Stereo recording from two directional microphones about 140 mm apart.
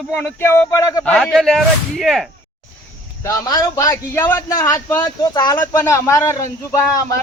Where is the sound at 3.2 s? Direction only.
25° left (ahead or behind).